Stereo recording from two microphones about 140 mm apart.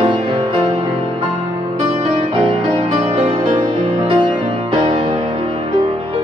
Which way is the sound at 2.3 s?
35° right (ahead or behind).